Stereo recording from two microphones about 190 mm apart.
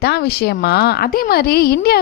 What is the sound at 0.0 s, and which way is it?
A woman's voice, 55° left (ahead or behind).